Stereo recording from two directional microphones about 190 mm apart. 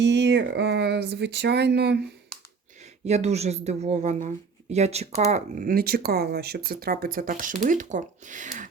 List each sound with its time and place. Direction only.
0.0 s speech: 65° right (ahead or behind)
3.0 s speech: 35° right (ahead or behind)
5.3 s speech: 45° right (ahead or behind)